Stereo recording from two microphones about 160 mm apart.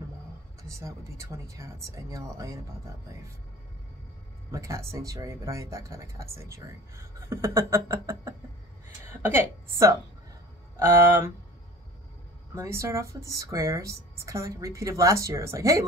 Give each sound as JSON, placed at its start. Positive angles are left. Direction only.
{"t": 0.7, "sound": "speech", "side_deg": -20}
{"t": 4.5, "sound": "speech", "side_deg": -20}
{"t": 7.2, "sound": "a sound", "side_deg": -15}
{"t": 9.0, "sound": "a woman's voice", "side_deg": -15}
{"t": 10.8, "sound": "a sound", "side_deg": -15}
{"t": 12.5, "sound": "speech", "side_deg": -15}